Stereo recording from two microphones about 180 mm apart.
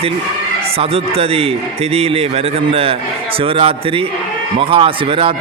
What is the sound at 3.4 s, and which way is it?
Speech, 30° right (ahead or behind).